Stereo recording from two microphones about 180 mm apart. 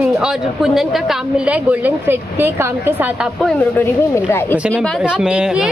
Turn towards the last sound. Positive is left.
turn(degrees=-5)  # may be behind; listen again after turning